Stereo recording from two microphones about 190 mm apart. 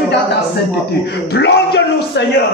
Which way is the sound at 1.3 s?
65° left (ahead or behind).